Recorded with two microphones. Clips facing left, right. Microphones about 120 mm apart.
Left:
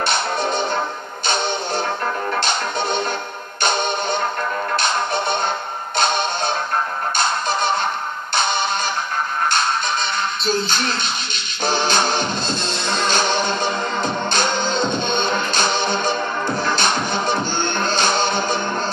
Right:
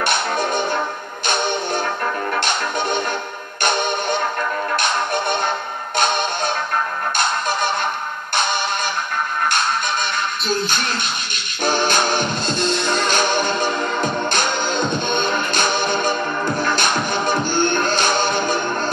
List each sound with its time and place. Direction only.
0.0 s music: 50° right (ahead or behind)
10.4 s music: 50° right (ahead or behind)